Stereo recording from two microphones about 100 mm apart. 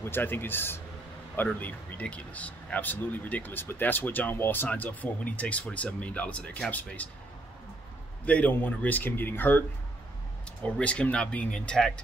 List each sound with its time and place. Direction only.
0.0 s speech: 20° left (ahead or behind)
8.3 s speech: 15° left (ahead or behind)